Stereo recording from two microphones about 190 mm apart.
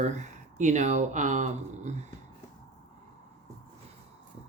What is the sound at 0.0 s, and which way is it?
Speech, 40° right (ahead or behind).